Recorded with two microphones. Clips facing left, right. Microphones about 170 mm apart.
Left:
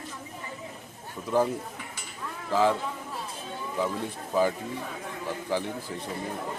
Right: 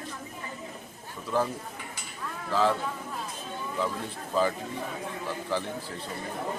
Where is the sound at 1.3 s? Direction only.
15° left (ahead or behind).